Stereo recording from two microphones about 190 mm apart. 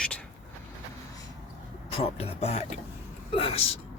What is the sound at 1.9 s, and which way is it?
Speech, 30° left (ahead or behind).